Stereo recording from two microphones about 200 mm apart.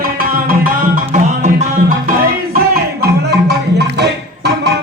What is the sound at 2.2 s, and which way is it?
Music, 50° right (ahead or behind).